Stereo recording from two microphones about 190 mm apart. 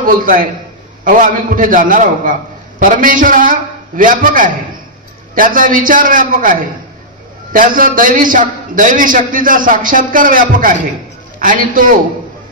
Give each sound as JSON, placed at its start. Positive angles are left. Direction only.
{"t": 0.0, "sound": "a man's voice", "side_deg": -45}